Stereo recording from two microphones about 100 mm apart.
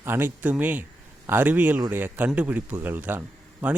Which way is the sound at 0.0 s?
20° right (ahead or behind).